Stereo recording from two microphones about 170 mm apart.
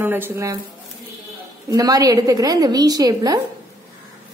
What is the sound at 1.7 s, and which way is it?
A woman's voice, 20° right (ahead or behind).